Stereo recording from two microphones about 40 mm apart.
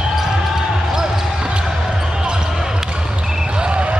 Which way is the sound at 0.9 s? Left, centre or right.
Centre.